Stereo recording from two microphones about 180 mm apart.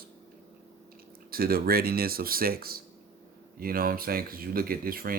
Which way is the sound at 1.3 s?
55° right (ahead or behind).